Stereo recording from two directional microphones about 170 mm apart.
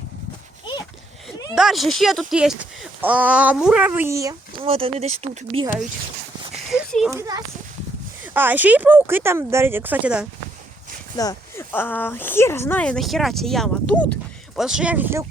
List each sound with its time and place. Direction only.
1.5 s speech: centre (ahead or behind); by 4.6 s 20° right (ahead or behind)
4.6 s speech: 35° right (ahead or behind)
6.5 s a sound: centre (ahead or behind)
7.1 s a child's voice: 20° right (ahead or behind)
11.2 s speech: 20° left (ahead or behind); by 15.3 s 15° right (ahead or behind)